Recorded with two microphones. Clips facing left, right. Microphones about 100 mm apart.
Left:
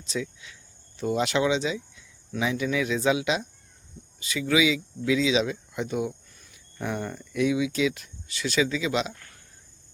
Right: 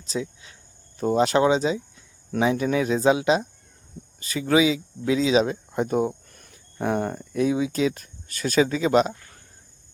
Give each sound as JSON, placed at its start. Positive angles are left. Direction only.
{"t": 0.0, "sound": "speech", "side_deg": -35}
{"t": 6.3, "sound": "cricket", "side_deg": -55}
{"t": 6.8, "sound": "speech", "side_deg": -45}